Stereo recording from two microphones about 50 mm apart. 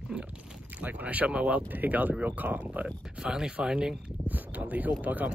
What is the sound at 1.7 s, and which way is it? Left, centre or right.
Speech, right.